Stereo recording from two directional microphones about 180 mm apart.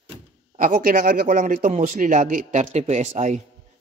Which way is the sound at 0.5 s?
50° right (ahead or behind).